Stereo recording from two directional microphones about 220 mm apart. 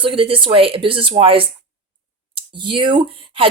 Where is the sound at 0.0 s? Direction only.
25° right (ahead or behind).